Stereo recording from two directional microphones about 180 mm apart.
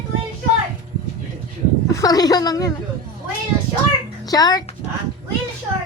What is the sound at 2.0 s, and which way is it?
Speech, 20° left (ahead or behind).